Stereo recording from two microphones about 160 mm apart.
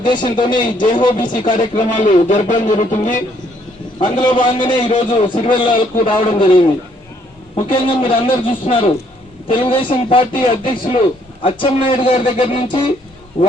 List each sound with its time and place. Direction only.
0.0 s speech: 30° left (ahead or behind)
1.7 s a man's voice: 50° left (ahead or behind)
4.0 s a man's voice: 30° left (ahead or behind)